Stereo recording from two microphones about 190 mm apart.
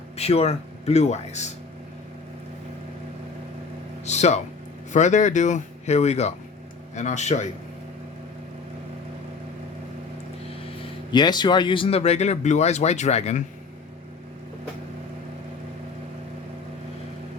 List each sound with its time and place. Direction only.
0.2 s speech: 35° left (ahead or behind)
4.0 s speech: 35° left (ahead or behind)
11.1 s speech: 20° left (ahead or behind)